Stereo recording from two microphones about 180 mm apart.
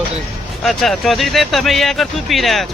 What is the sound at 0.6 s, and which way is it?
Speech, centre (ahead or behind).